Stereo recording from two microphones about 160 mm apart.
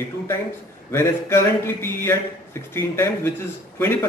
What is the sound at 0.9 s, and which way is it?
Speech, 15° left (ahead or behind).